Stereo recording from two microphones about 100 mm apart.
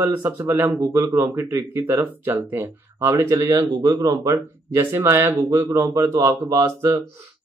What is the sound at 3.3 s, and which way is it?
A man's voice, 35° right (ahead or behind).